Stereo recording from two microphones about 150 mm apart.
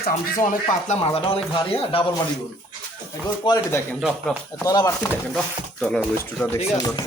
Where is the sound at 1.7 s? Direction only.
40° left (ahead or behind).